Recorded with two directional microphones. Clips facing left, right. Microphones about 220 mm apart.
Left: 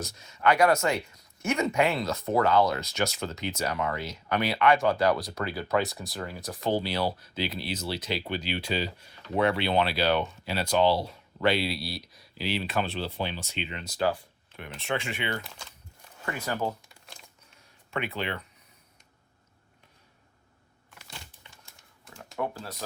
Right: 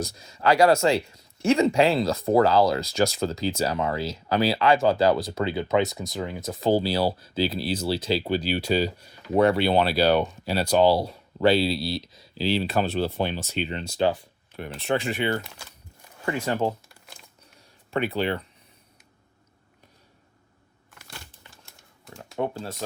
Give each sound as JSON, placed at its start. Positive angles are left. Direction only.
{"t": 0.0, "sound": "speech", "side_deg": -35}
{"t": 14.5, "sound": "speech", "side_deg": -35}
{"t": 15.4, "sound": "speech", "side_deg": -5}
{"t": 16.2, "sound": "speech", "side_deg": -25}
{"t": 17.9, "sound": "speech", "side_deg": -35}
{"t": 22.2, "sound": "speech", "side_deg": -25}